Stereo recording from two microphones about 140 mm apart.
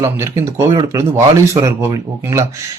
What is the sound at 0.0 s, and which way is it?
A man's voice, 20° right (ahead or behind).